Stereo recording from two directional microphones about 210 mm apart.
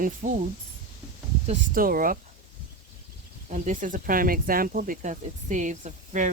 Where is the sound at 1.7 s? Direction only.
40° right (ahead or behind).